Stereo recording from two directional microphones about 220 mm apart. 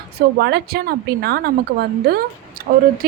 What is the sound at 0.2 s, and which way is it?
A woman's voice, 45° right (ahead or behind).